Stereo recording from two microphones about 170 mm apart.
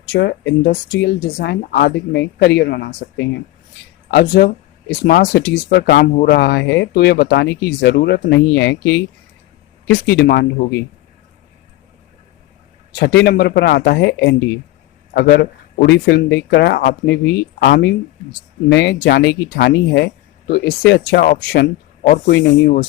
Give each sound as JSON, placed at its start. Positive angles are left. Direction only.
{"t": 0.1, "sound": "speech", "side_deg": 90}
{"t": 13.0, "sound": "speech", "side_deg": 90}
{"t": 18.7, "sound": "speech", "side_deg": 90}